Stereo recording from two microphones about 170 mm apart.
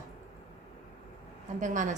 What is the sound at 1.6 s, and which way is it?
Speech, 50° right (ahead or behind).